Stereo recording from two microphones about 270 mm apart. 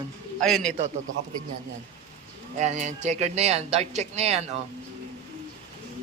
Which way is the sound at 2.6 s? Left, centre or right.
Right.